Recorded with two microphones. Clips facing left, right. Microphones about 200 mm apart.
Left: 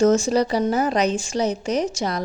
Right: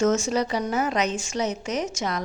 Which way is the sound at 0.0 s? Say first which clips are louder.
Left 5 dB; 35° left (ahead or behind).